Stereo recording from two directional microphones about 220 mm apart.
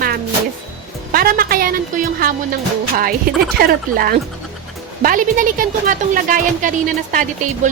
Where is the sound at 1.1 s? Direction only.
40° right (ahead or behind).